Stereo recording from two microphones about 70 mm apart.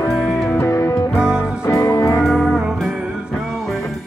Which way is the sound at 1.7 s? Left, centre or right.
Left.